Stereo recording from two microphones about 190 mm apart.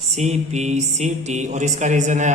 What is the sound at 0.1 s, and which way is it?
Speech, 35° right (ahead or behind).